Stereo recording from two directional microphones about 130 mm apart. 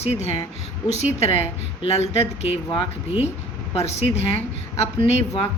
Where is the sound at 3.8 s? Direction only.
55° left (ahead or behind).